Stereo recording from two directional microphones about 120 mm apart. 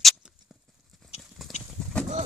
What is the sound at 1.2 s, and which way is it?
Horse, centre (ahead or behind).